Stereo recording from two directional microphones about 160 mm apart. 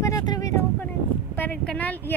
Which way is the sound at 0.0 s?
20° left (ahead or behind).